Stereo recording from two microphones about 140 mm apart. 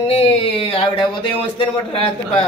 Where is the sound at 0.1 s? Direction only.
40° left (ahead or behind).